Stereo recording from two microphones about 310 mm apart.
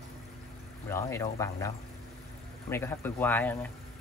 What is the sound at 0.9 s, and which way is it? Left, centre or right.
A man's voice, centre.